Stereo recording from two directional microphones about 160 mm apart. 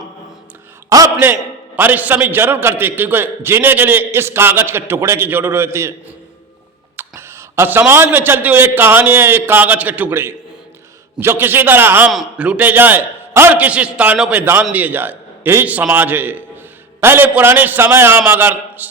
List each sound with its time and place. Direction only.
0.9 s a man's voice: 20° right (ahead or behind)
1.1 s a man's voice: 10° right (ahead or behind)
6.9 s a man's voice: 15° right (ahead or behind)